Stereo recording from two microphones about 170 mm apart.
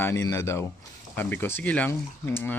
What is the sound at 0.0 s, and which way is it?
Speech, 15° left (ahead or behind).